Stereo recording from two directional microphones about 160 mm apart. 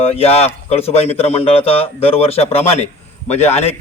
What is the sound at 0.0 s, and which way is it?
A man's voice, 40° left (ahead or behind).